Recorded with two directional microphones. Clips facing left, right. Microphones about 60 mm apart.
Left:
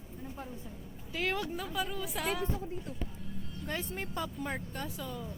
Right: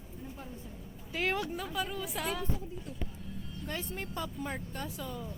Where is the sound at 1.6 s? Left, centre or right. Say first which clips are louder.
Even; centre.